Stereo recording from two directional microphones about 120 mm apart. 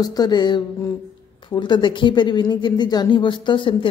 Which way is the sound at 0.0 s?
35° left (ahead or behind).